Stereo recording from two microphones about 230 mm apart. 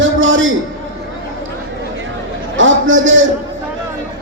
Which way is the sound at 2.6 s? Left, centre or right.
Right.